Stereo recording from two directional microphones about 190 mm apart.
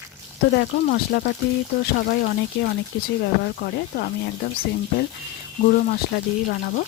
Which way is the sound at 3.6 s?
50° left (ahead or behind).